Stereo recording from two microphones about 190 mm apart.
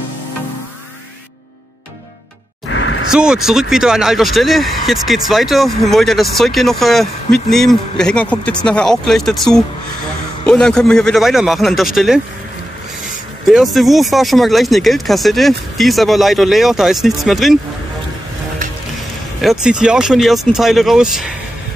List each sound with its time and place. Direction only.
2.7 s a sound: 90° left
3.1 s speech: 5° right (ahead or behind)
13.5 s speech: centre (ahead or behind)
19.4 s speech: 5° right (ahead or behind)